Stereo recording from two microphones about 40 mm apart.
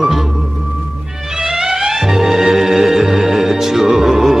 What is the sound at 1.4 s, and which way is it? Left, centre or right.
Music, centre.